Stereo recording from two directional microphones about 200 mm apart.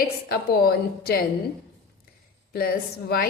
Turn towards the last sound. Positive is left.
turn(degrees=50)  # may be behind; listen again after turning